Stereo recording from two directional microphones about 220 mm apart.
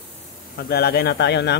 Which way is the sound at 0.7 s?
45° left (ahead or behind).